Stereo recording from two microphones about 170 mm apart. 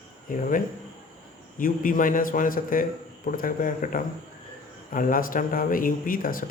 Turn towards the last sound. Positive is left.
turn(degrees=55)  # may be behind; listen again after turning